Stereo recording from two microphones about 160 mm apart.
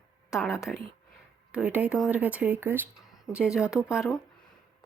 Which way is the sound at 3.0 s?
5° right (ahead or behind).